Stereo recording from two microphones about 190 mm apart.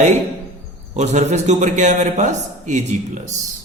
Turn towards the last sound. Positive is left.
turn(degrees=-40)  # may be behind; listen again after turning